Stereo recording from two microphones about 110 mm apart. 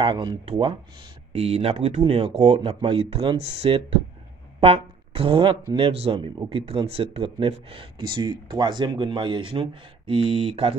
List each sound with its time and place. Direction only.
0.0 s speech: 45° right (ahead or behind)
1.3 s speech: 65° right (ahead or behind)
2.5 s speech: 55° right (ahead or behind)